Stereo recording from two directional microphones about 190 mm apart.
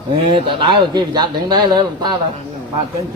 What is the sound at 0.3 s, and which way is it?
Speech, 25° right (ahead or behind).